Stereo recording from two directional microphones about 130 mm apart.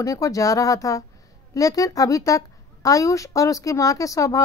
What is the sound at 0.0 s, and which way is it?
Speech, 25° left (ahead or behind).